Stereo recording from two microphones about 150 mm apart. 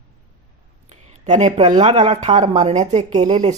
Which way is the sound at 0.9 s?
50° right (ahead or behind).